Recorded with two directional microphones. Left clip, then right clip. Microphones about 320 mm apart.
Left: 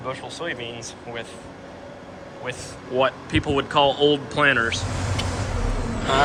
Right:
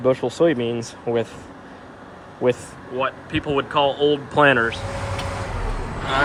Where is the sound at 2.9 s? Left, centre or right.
Centre.